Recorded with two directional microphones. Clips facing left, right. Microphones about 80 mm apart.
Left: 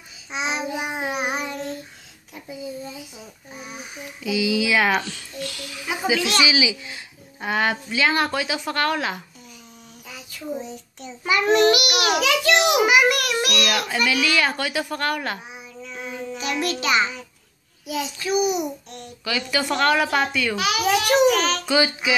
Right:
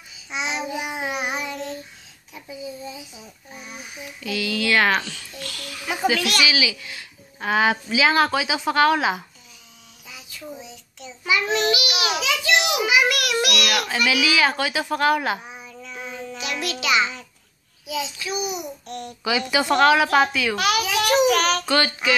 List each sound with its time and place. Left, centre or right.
0.3 s child singing: left
4.2 s speech: centre
5.0 s a sound: left
7.3 s a woman's voice: centre
10.0 s child singing: left
13.7 s a woman's voice: centre
15.5 s child singing: centre
16.8 s a child's voice: left
17.8 s a child's voice: left
19.2 s a woman's voice: centre
19.6 s a woman's voice: centre
21.7 s speech: centre